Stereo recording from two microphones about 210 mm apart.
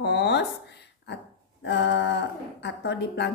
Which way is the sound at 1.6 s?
55° left (ahead or behind).